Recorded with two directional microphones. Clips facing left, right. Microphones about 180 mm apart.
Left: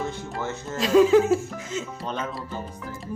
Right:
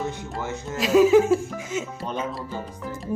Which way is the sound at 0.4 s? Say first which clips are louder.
Right 1 dB; 15° right (ahead or behind).